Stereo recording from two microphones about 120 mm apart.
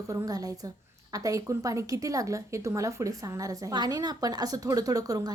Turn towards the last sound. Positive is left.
turn(degrees=-30)  # may be behind; listen again after turning